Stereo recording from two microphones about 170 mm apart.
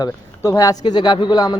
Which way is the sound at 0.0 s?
20° left (ahead or behind).